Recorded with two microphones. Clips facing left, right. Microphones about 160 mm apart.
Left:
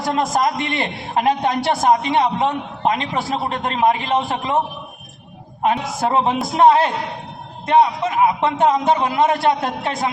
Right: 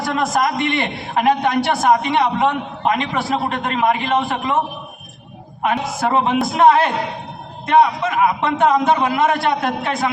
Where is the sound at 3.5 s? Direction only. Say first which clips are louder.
Left 1 dB; 30° left (ahead or behind).